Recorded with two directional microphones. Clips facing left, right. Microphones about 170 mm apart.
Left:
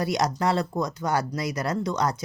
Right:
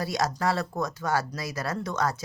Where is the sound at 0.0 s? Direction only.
20° left (ahead or behind).